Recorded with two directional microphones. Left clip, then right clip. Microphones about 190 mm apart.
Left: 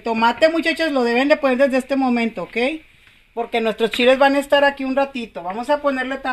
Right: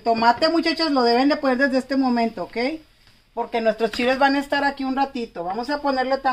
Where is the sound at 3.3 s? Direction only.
40° left (ahead or behind).